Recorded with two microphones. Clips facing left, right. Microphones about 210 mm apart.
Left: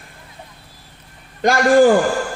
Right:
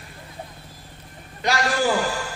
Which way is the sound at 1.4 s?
50° left (ahead or behind).